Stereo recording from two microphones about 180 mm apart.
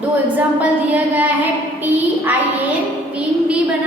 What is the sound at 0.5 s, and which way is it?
Speech, 10° right (ahead or behind).